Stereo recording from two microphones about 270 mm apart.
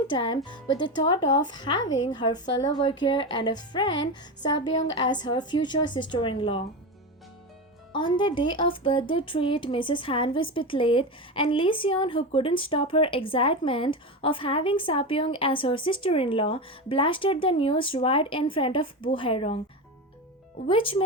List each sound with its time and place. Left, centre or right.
0.1 s speech: centre
7.9 s speech: centre
20.7 s speech: centre